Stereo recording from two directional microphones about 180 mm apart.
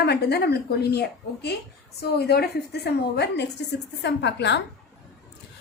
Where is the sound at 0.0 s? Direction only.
65° left (ahead or behind).